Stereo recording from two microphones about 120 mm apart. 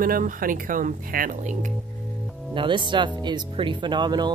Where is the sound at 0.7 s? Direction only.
90° right.